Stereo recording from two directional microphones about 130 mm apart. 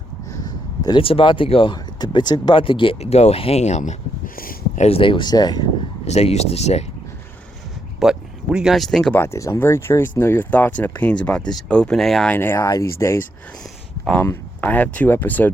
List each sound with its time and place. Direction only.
0.3 s a sound: 30° left (ahead or behind)
1.0 s speech: 45° left (ahead or behind); by 3.9 s 65° left (ahead or behind)
4.4 s a sound: 85° left
4.9 s speech: 45° left (ahead or behind)
6.1 s speech: 55° left (ahead or behind)
7.9 s speech: 5° right (ahead or behind)
9.1 s speech: 20° left (ahead or behind); by 12.3 s centre (ahead or behind)
12.3 s speech: 15° left (ahead or behind)
14.0 s speech: 10° left (ahead or behind)